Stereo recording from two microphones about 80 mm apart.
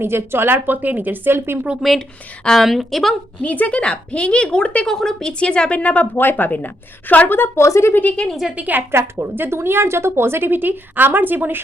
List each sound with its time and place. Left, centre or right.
0.0 s speech: right
1.8 s speech: centre
3.4 s a woman's voice: centre
8.0 s speech: centre
8.5 s speech: right